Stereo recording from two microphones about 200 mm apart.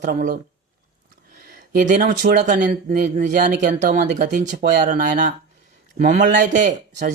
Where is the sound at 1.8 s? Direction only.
40° right (ahead or behind).